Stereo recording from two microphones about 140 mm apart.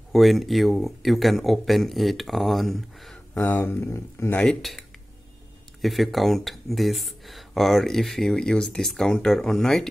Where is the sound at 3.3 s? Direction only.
15° left (ahead or behind).